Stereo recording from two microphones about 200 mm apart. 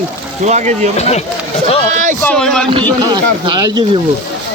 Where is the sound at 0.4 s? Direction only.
35° right (ahead or behind).